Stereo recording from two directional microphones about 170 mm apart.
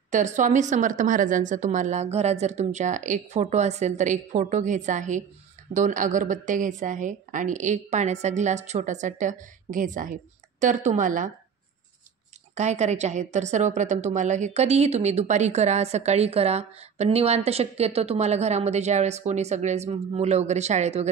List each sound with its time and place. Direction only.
0.1 s a woman's voice: 45° right (ahead or behind)
12.5 s a woman's voice: 40° right (ahead or behind)